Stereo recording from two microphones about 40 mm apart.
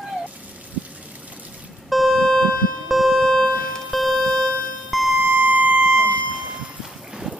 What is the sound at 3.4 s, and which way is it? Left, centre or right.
Music, left.